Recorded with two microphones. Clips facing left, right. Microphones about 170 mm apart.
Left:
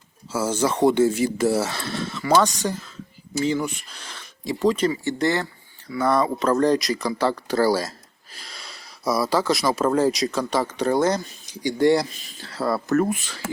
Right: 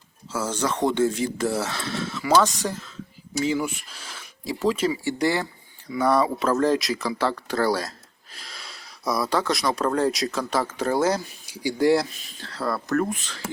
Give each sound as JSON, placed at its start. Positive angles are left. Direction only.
{"t": 0.3, "sound": "speech", "side_deg": 5}